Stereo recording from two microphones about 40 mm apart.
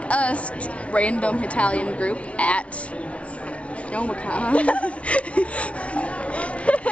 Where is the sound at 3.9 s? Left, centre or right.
Left.